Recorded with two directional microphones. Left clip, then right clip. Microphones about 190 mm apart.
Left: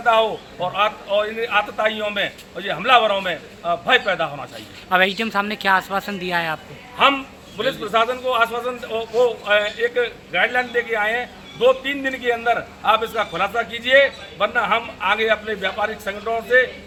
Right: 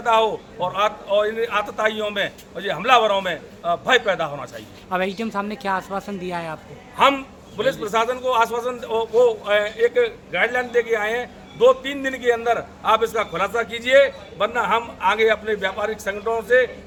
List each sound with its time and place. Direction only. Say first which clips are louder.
0.0 s a man's voice: left 1 dB; 20° right (ahead or behind)
4.9 s speech: left 6 dB; 5° right (ahead or behind)
7.6 s a man's voice: left 1 dB; 20° right (ahead or behind)